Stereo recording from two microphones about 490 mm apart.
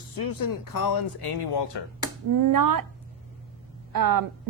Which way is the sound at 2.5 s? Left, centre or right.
Right.